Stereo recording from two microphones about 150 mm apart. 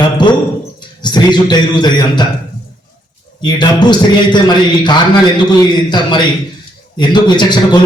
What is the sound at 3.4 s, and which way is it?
A man's voice, 30° left (ahead or behind).